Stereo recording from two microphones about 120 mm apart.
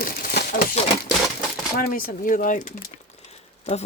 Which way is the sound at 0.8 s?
60° left (ahead or behind).